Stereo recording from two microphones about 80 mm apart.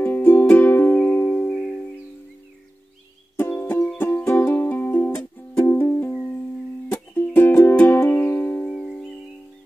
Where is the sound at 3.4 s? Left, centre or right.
Left.